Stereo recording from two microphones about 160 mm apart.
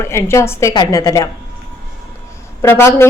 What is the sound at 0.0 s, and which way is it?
A woman's voice, 15° left (ahead or behind).